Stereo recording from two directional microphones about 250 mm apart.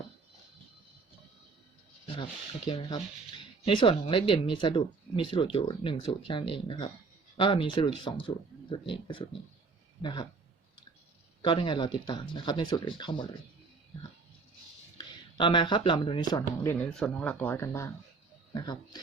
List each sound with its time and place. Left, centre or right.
2.6 s speech: centre
11.4 s speech: centre
14.9 s speech: centre
16.9 s speech: centre